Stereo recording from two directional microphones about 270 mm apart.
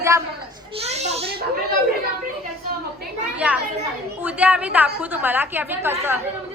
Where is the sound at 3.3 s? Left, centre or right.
Centre.